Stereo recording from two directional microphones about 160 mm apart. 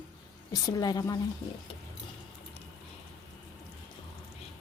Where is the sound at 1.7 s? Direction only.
35° left (ahead or behind).